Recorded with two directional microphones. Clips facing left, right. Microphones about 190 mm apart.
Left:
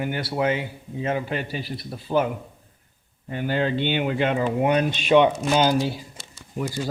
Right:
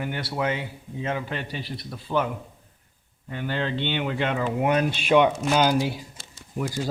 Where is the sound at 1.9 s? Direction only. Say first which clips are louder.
Left 3 dB; 40° left (ahead or behind).